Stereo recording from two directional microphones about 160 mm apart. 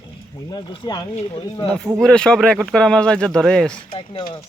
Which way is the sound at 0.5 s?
30° left (ahead or behind).